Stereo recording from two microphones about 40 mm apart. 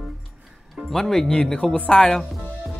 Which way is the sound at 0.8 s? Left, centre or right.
Centre.